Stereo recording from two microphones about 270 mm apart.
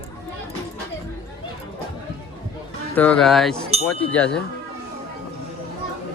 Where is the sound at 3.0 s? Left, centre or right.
Centre.